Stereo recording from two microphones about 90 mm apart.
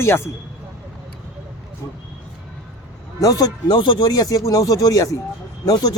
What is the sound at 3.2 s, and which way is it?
Speech, 45° left (ahead or behind).